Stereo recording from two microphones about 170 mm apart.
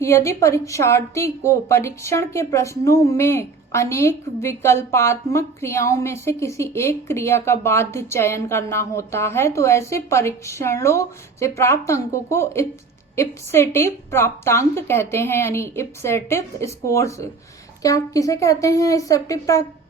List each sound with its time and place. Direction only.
0.0 s a woman's voice: 15° left (ahead or behind)